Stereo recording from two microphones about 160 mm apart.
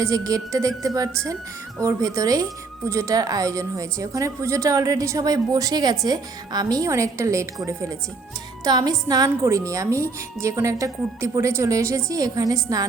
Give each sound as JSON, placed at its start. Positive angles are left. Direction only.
{"t": 0.0, "sound": "speech", "side_deg": -20}